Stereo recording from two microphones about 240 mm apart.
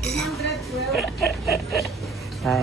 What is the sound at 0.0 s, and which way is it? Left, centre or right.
Dishes, centre.